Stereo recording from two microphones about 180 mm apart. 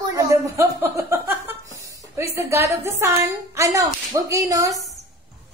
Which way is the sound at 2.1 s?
15° right (ahead or behind).